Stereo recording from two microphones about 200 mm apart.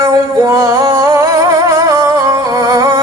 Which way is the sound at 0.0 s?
15° right (ahead or behind).